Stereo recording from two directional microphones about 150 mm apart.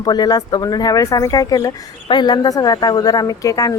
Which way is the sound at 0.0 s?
25° left (ahead or behind).